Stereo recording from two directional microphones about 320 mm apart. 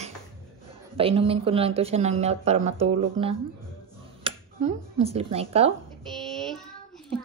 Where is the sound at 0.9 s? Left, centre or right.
Centre.